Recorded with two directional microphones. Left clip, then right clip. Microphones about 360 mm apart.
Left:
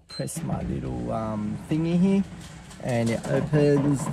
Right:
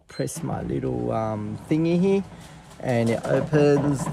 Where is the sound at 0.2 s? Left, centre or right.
Right.